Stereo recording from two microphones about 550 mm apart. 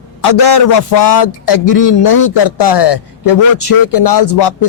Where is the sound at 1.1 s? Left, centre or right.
Left.